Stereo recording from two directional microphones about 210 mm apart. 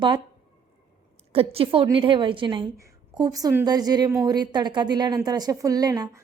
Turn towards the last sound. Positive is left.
turn(degrees=-20)  # may be behind; listen again after turning